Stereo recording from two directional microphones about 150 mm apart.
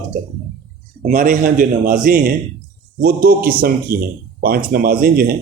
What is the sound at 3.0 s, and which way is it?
A man's voice, 85° right.